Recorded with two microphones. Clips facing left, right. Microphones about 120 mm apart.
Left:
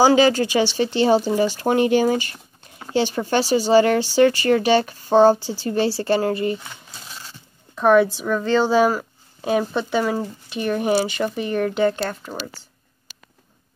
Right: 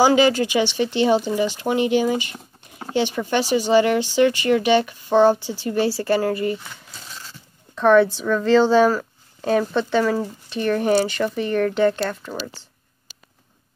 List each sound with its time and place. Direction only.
0.0 s speech: 35° left (ahead or behind)
7.7 s a woman's voice: 10° left (ahead or behind)